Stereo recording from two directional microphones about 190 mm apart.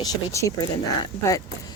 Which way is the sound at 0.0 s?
15° left (ahead or behind).